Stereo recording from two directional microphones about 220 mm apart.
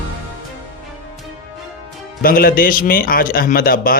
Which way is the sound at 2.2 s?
40° left (ahead or behind).